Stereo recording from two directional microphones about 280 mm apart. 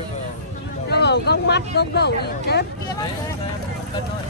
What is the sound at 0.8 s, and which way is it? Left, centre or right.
Speech, left.